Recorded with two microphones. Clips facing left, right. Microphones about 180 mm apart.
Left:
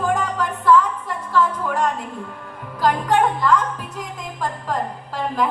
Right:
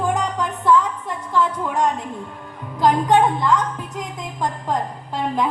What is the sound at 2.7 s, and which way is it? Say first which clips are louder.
A woman's voice: right 2 dB; 20° right (ahead or behind).